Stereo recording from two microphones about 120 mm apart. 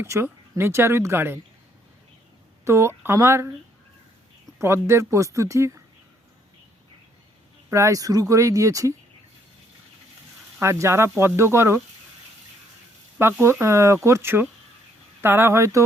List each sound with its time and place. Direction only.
0.0 s speech: 20° right (ahead or behind)
2.6 s speech: 20° right (ahead or behind)
4.5 s speech: 20° right (ahead or behind)
7.7 s speech: 25° right (ahead or behind)
10.6 s speech: 25° right (ahead or behind)
13.1 s speech: 20° right (ahead or behind)